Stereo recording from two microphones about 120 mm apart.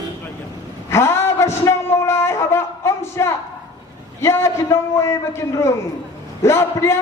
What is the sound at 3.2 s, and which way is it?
A man's voice, 25° left (ahead or behind).